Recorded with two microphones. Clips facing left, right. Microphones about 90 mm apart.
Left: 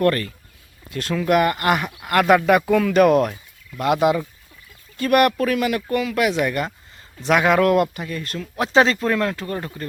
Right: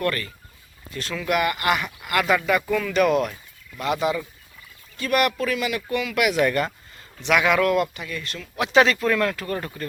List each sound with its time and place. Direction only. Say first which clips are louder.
0.0 s speech: left 6 dB; 40° left (ahead or behind)
6.4 s speech: right 1 dB; 20° left (ahead or behind)
7.2 s speech: left 3 dB; 40° left (ahead or behind); by 9.8 s 25° left (ahead or behind)